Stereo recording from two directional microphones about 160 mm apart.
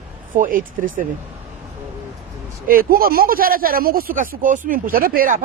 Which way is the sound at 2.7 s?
65° right (ahead or behind).